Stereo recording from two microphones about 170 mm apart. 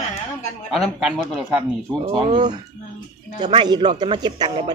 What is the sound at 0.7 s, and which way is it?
Speech, centre (ahead or behind).